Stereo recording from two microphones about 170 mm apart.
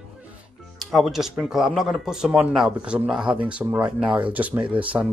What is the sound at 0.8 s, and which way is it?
Speech, centre (ahead or behind).